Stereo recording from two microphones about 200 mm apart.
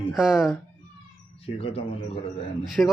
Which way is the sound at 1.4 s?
30° left (ahead or behind).